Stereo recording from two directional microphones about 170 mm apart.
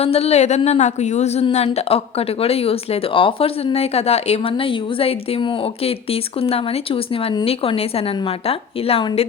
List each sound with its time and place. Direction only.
0.0 s speech: 40° left (ahead or behind)